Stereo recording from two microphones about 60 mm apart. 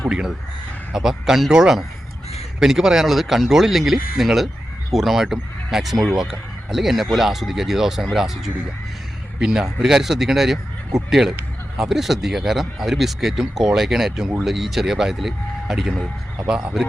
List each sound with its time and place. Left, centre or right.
0.1 s speech: centre
16.5 s speech: centre